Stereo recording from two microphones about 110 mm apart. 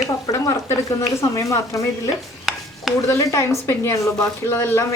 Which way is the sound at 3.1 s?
25° left (ahead or behind).